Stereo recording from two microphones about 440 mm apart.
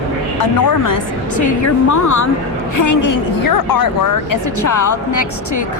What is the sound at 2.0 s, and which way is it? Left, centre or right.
Speech, left.